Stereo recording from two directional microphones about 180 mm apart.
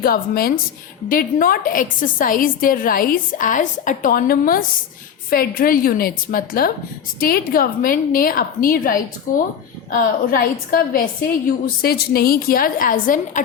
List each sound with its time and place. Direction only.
0.0 s a woman's voice: 55° left (ahead or behind)